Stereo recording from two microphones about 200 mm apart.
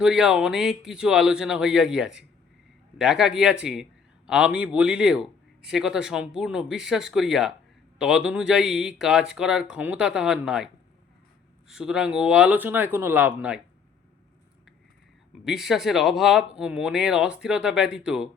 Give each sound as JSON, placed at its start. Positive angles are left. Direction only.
{"t": 0.0, "sound": "speech", "side_deg": 0}
{"t": 11.7, "sound": "speech", "side_deg": -5}
{"t": 15.4, "sound": "speech", "side_deg": 0}